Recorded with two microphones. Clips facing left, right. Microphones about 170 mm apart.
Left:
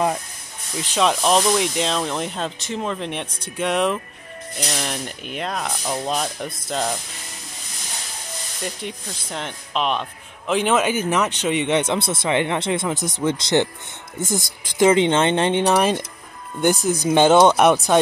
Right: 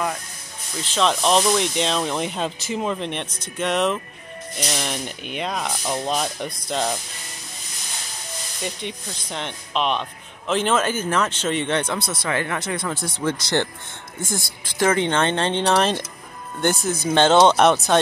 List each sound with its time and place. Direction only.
0.9 s speech: 5° left (ahead or behind)
8.6 s speech: centre (ahead or behind)